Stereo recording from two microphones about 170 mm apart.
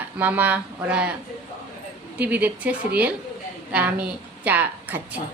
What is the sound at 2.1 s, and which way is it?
A woman's voice, 10° right (ahead or behind).